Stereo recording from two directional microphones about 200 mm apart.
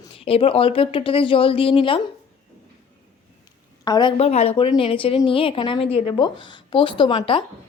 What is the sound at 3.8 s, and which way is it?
A woman's voice, 20° left (ahead or behind).